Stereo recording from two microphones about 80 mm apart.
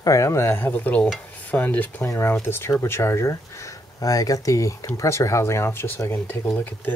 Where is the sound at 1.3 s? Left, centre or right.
Centre.